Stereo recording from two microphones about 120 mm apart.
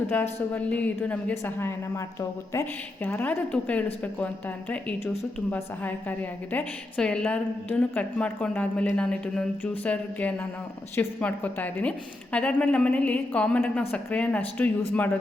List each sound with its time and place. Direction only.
0.1 s a woman's voice: 15° left (ahead or behind)